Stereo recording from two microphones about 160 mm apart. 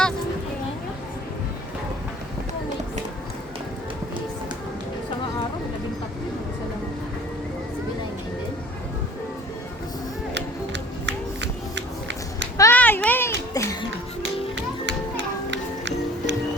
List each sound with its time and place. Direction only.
10.3 s music: 90° right
12.5 s a sound: 15° left (ahead or behind)
14.2 s music: 90° right